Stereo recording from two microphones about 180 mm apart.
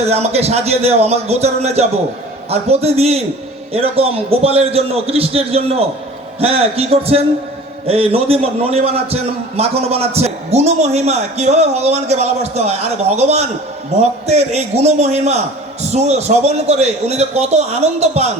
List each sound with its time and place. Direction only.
0.0 s a man's voice: 35° right (ahead or behind)